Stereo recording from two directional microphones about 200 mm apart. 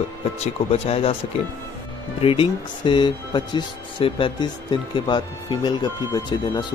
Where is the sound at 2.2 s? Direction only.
25° left (ahead or behind).